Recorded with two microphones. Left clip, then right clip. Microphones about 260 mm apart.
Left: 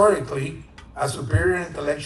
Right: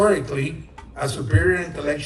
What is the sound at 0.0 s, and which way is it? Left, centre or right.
A man's voice, centre.